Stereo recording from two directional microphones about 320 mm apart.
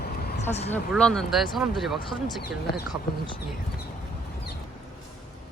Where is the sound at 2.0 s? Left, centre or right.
Left.